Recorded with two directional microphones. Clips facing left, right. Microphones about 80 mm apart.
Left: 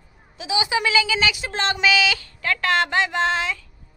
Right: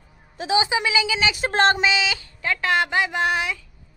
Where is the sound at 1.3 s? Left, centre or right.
Right.